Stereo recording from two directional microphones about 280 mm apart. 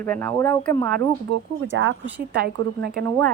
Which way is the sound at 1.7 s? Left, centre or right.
Right.